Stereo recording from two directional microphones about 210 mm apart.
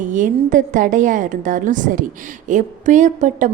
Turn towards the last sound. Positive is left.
turn(degrees=-35)  # may be behind; listen again after turning